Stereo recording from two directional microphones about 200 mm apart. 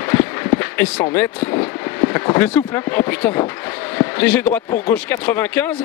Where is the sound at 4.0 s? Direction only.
10° left (ahead or behind).